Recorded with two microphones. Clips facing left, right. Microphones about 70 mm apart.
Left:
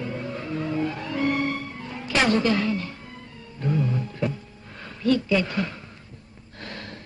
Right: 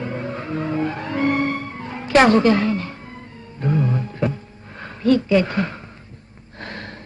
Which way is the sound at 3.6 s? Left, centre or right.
Right.